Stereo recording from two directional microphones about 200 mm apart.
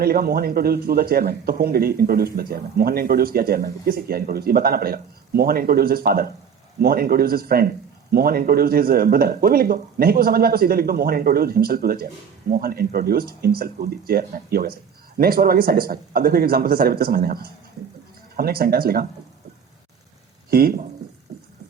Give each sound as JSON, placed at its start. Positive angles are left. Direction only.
{"t": 0.0, "sound": "a man's voice", "side_deg": -50}
{"t": 20.5, "sound": "a man's voice", "side_deg": -50}